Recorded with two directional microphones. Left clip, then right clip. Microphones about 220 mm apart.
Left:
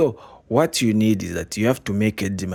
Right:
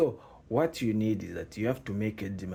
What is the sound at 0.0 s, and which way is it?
Speech, 45° left (ahead or behind).